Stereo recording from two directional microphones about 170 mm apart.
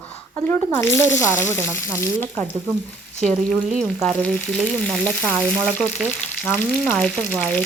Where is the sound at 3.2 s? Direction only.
Centre (ahead or behind).